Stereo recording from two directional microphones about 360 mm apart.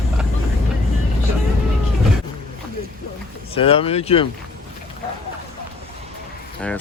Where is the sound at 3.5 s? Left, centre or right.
Centre.